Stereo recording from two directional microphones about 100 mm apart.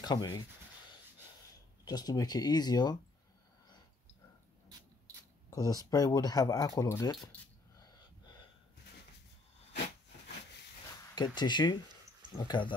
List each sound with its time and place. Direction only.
0.0 s speech: 45° left (ahead or behind)
1.9 s speech: 40° left (ahead or behind)
5.5 s speech: 40° left (ahead or behind)
11.1 s speech: 50° left (ahead or behind)